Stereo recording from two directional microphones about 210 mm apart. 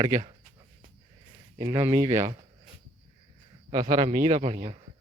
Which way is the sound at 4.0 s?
35° right (ahead or behind).